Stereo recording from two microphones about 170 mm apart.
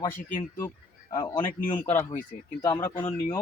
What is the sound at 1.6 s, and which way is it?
Speech, 50° left (ahead or behind).